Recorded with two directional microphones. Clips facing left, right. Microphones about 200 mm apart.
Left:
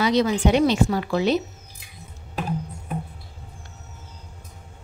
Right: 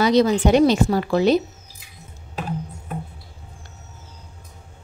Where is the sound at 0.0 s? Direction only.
40° right (ahead or behind).